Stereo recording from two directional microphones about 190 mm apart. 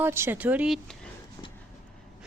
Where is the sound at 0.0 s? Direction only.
10° right (ahead or behind).